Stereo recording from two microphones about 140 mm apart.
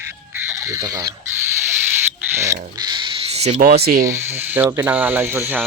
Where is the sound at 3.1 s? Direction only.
45° right (ahead or behind).